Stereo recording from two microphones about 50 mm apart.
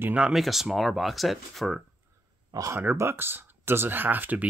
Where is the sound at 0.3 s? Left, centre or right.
Centre.